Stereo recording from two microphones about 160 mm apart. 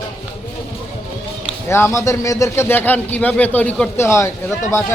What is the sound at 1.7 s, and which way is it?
A man's voice, 15° left (ahead or behind).